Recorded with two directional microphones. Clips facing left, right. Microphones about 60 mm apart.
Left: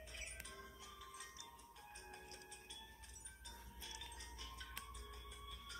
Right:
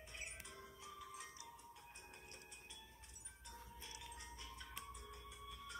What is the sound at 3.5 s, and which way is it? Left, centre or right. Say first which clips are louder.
Music: right 1 dB; right.